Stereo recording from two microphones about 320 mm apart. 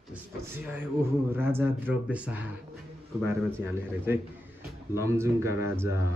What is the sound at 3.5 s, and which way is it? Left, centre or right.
Speech, centre.